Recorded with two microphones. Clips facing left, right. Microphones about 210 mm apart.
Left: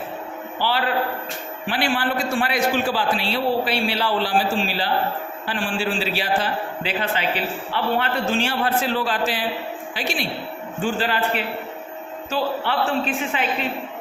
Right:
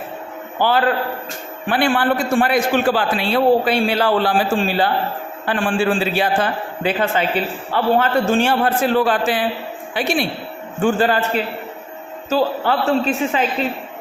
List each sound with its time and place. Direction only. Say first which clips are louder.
1.6 s a man's voice: right 6 dB; 50° right (ahead or behind)
12.3 s a man's voice: right 6 dB; 40° right (ahead or behind)